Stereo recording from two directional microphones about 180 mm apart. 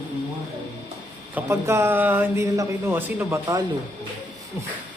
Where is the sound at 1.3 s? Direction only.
15° right (ahead or behind).